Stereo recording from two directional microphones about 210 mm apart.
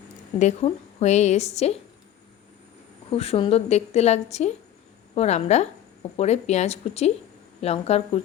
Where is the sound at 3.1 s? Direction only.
30° left (ahead or behind).